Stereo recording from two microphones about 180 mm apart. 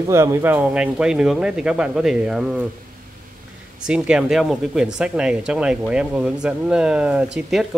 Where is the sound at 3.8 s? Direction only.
5° right (ahead or behind).